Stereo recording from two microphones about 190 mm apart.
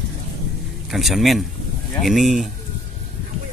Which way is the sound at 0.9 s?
Centre (ahead or behind).